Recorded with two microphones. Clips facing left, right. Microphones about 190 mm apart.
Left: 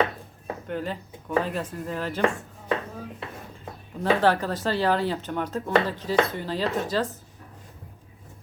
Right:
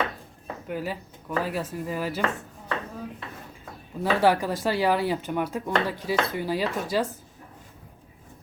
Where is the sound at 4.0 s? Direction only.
10° right (ahead or behind).